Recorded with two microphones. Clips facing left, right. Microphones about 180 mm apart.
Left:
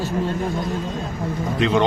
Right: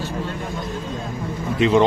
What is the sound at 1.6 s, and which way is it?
Speech, 5° right (ahead or behind).